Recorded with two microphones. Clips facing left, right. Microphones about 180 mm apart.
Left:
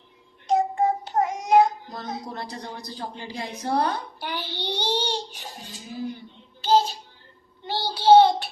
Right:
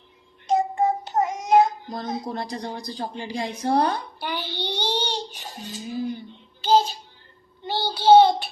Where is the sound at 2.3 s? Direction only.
15° right (ahead or behind).